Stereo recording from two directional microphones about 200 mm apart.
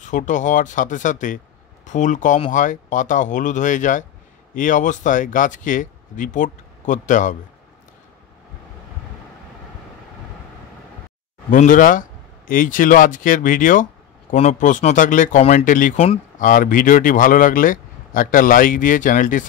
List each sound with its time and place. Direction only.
0.0 s speech: 40° left (ahead or behind)
11.5 s speech: 40° left (ahead or behind)
16.0 s speech: 30° left (ahead or behind)
16.4 s speech: 40° left (ahead or behind)